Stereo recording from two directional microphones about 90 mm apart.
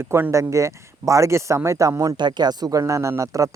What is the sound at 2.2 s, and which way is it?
Speech, 55° right (ahead or behind).